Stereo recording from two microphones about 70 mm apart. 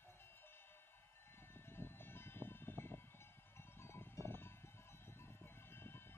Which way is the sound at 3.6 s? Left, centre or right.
Left.